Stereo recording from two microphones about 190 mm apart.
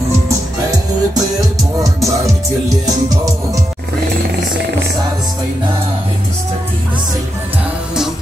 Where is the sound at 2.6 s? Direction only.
20° right (ahead or behind).